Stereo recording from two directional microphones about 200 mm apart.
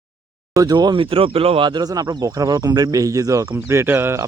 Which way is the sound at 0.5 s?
20° right (ahead or behind).